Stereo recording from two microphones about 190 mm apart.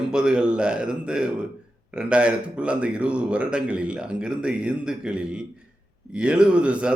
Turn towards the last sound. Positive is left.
turn(degrees=-5)  # may be behind; listen again after turning